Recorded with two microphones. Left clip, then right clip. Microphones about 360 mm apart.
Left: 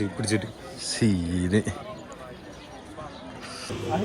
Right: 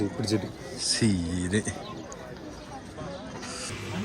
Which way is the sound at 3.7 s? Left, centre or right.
Centre.